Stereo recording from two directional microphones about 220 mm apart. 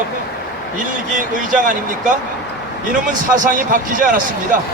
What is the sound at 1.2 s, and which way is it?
Speech, 35° right (ahead or behind).